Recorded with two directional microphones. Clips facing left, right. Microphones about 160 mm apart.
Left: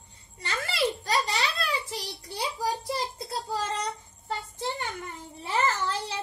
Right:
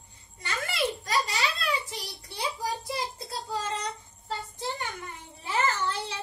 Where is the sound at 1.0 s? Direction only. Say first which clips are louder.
Left 1 dB; 30° left (ahead or behind).